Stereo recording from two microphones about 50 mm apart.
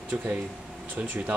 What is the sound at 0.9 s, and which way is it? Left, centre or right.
Speech, right.